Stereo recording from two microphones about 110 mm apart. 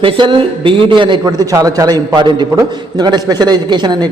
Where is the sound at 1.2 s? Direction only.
35° right (ahead or behind).